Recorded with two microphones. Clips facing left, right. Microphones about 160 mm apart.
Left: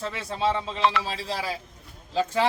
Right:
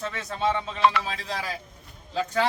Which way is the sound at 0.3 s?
30° left (ahead or behind).